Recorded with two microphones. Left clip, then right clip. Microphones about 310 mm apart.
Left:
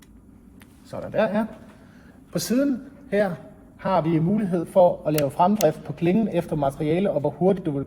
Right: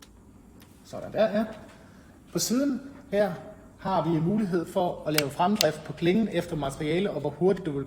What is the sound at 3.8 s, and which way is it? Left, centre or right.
Speech, left.